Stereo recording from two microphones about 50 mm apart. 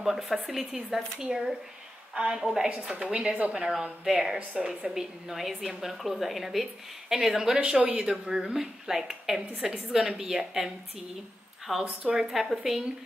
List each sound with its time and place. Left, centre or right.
0.0 s a woman's voice: centre
2.1 s a woman's voice: right
3.5 s a woman's voice: centre
7.5 s a woman's voice: centre
11.8 s speech: centre
12.3 s a woman's voice: centre